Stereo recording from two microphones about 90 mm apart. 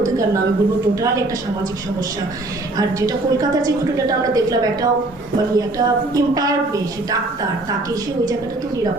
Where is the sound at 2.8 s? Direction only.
40° right (ahead or behind).